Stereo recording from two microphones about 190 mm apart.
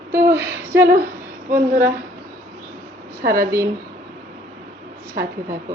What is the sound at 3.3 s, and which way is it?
Speech, 15° right (ahead or behind).